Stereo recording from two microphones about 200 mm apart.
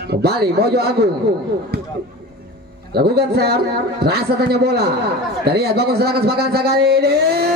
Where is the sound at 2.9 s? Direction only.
50° right (ahead or behind).